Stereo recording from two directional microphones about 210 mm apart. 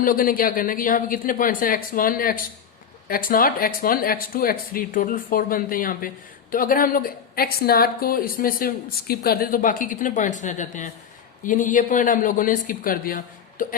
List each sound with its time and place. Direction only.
0.0 s a woman's voice: 40° left (ahead or behind)